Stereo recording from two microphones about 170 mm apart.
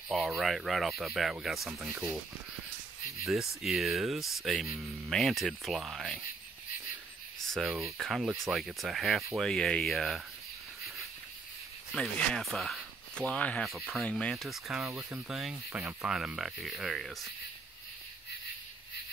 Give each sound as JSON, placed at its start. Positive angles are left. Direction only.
{"t": 0.1, "sound": "speech", "side_deg": 0}
{"t": 3.3, "sound": "speech", "side_deg": 0}
{"t": 7.5, "sound": "speech", "side_deg": 0}
{"t": 11.9, "sound": "speech", "side_deg": 5}
{"t": 14.9, "sound": "speech", "side_deg": -15}
{"t": 15.2, "sound": "speech", "side_deg": 0}